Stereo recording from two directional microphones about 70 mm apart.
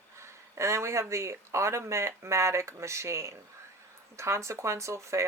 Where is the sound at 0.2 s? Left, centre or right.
Right.